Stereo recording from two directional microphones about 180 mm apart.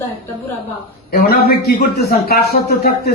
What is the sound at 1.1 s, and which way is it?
Speech, 55° left (ahead or behind).